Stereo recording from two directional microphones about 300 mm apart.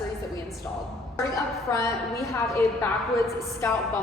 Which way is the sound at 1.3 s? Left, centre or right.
Centre.